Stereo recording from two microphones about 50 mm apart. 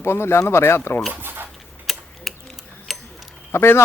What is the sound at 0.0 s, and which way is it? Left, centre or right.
Speech, left.